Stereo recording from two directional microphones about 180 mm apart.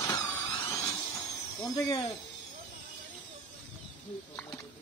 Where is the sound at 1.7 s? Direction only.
20° left (ahead or behind).